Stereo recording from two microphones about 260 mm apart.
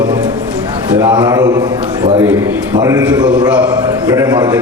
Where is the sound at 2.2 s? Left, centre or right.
Centre.